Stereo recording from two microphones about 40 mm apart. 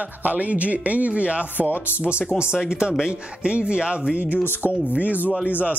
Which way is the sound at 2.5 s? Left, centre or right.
Centre.